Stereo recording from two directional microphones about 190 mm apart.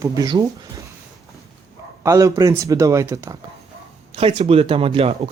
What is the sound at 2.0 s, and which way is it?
Speech, 15° right (ahead or behind).